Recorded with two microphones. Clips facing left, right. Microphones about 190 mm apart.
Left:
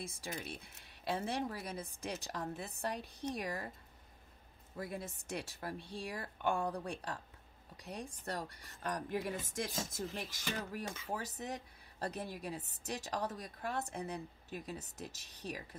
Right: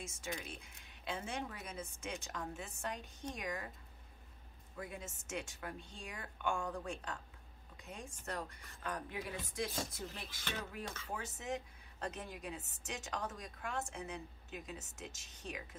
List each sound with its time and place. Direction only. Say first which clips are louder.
0.0 s a woman's voice: left 1 dB; 35° left (ahead or behind)
4.7 s a woman's voice: left 4 dB; 35° left (ahead or behind)